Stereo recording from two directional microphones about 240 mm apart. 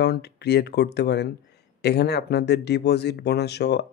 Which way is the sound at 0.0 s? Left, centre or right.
Left.